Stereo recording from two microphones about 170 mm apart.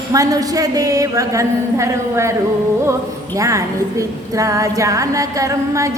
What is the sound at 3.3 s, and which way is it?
Speech, 20° right (ahead or behind).